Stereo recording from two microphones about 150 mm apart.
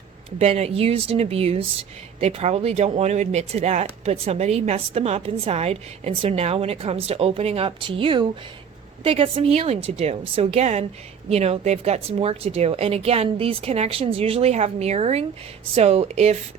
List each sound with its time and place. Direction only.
0.3 s a woman's voice: 45° right (ahead or behind)